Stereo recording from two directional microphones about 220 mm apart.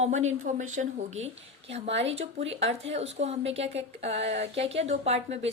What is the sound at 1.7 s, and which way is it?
Speech, 30° right (ahead or behind).